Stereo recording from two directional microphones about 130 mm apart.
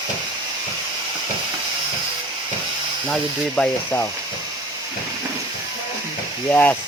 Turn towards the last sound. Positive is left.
turn(degrees=15)  # may be behind; listen again after turning